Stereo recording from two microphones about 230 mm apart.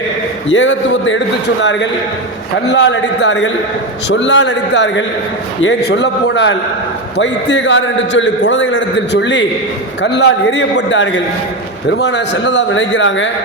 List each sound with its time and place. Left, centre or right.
0.4 s a man's voice: left
2.7 s a man's voice: left